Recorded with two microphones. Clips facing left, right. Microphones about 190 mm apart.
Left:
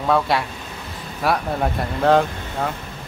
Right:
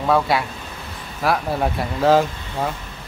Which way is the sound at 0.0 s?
Centre (ahead or behind).